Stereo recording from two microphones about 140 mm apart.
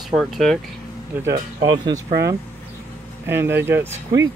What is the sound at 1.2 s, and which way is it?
Speech, 25° right (ahead or behind).